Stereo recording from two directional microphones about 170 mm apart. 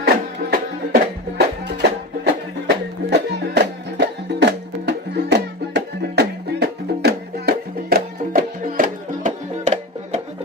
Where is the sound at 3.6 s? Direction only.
85° right; by 9.3 s 55° right (ahead or behind).